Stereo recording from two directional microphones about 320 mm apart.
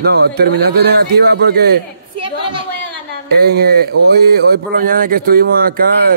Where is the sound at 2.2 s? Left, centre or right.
Centre.